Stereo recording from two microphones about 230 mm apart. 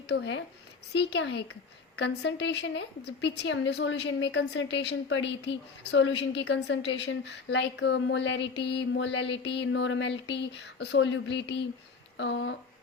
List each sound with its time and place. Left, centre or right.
0.1 s a woman's voice: left